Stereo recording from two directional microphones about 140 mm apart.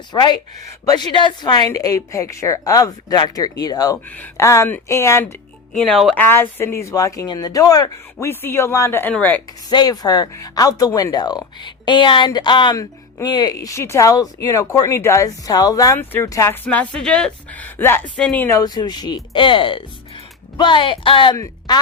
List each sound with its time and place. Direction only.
0.1 s speech: 30° left (ahead or behind)
4.1 s speech: 15° left (ahead or behind)
5.7 s speech: 5° left (ahead or behind)
6.1 s speech: 15° left (ahead or behind)
9.6 s speech: 30° left (ahead or behind)
16.6 s speech: 10° left (ahead or behind)
18.5 s speech: 30° left (ahead or behind)
21.3 s speech: 25° left (ahead or behind)